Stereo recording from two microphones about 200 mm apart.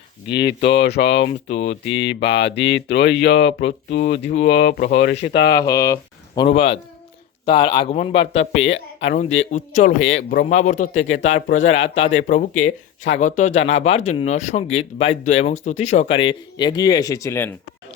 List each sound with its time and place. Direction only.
0.3 s speech: 55° left (ahead or behind)
1.2 s speech: 35° left (ahead or behind)
1.9 s speech: 65° left (ahead or behind)
3.6 s speech: 35° left (ahead or behind)
5.2 s speech: 60° left (ahead or behind)
5.5 s speech: 20° left (ahead or behind)